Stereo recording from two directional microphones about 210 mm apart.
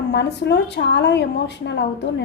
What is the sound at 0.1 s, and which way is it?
A woman's voice, 55° left (ahead or behind).